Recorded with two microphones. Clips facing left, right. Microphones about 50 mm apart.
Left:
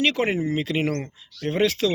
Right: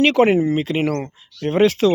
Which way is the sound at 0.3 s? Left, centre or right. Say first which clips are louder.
Right 6 dB; right.